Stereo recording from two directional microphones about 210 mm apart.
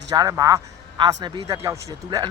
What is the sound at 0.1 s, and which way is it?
A man's voice, 15° right (ahead or behind).